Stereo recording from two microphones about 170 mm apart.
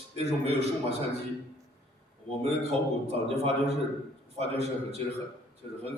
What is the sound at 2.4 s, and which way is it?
A man's voice, 35° right (ahead or behind).